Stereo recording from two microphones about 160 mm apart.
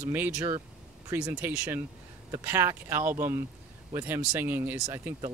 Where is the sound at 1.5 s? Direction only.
5° right (ahead or behind).